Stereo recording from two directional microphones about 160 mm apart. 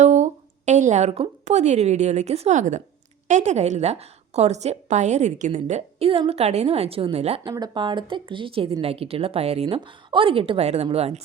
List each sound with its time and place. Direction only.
0.0 s a woman's voice: 45° right (ahead or behind)
7.4 s speech: 25° right (ahead or behind)